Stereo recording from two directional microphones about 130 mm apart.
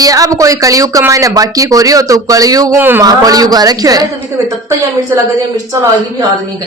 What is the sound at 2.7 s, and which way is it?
Speech, 15° right (ahead or behind).